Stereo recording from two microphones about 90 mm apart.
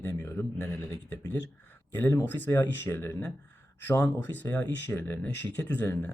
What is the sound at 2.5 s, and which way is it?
Speech, 25° left (ahead or behind).